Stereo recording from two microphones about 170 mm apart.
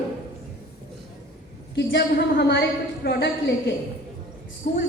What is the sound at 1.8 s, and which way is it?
A woman's voice, 85° left.